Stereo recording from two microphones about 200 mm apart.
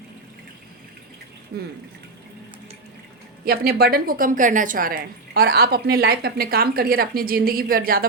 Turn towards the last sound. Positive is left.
turn(degrees=-45)  # may be behind; listen again after turning